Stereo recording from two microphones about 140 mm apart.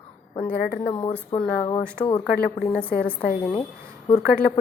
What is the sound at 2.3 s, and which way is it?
Speech, 90° left.